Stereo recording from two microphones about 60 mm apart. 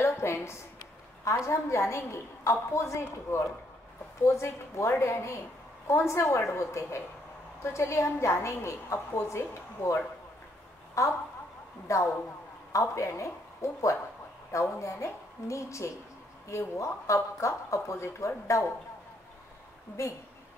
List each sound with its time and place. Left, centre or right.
0.1 s a woman's voice: left
11.0 s speech: left
20.0 s a woman's voice: left